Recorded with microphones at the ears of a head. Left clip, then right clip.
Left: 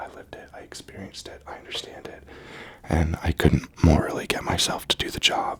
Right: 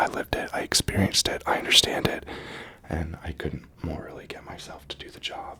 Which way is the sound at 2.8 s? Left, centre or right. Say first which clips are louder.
Left 9 dB; left.